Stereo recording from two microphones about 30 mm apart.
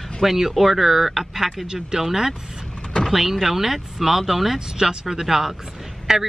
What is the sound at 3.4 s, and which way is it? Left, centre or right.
Speech, centre.